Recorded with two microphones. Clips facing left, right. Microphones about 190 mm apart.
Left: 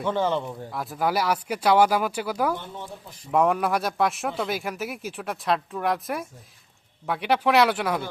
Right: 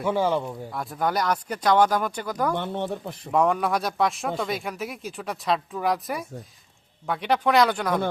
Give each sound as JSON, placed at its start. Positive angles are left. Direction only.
{"t": 0.0, "sound": "speech", "side_deg": -10}
{"t": 2.6, "sound": "speech", "side_deg": -65}
{"t": 3.3, "sound": "speech", "side_deg": 0}